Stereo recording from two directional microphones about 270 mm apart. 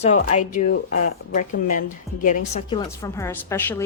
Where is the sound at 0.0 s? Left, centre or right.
Left.